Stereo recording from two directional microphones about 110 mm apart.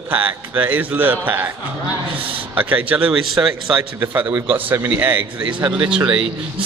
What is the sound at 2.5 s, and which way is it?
A man's voice, 15° right (ahead or behind).